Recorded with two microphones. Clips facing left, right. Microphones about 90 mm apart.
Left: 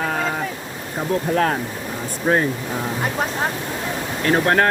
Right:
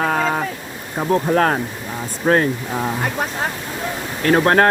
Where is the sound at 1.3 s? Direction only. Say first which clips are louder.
Right 2 dB; 50° right (ahead or behind).